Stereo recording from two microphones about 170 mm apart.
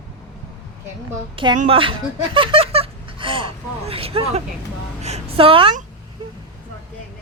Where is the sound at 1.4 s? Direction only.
30° right (ahead or behind).